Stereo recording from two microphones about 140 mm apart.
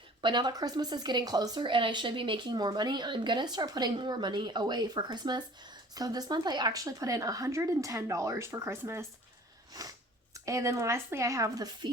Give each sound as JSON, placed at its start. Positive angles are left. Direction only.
{"t": 0.2, "sound": "a woman's voice", "side_deg": -35}